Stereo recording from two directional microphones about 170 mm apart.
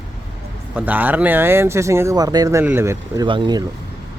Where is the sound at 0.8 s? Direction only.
10° right (ahead or behind).